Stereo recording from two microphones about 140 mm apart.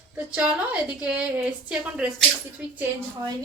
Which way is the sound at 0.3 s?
10° right (ahead or behind).